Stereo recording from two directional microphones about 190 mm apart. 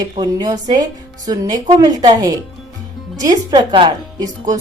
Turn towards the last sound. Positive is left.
turn(degrees=-25)  # may be behind; listen again after turning